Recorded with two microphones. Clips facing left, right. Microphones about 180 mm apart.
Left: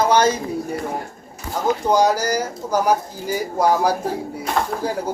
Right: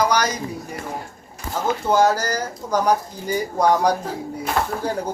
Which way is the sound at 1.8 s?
15° left (ahead or behind).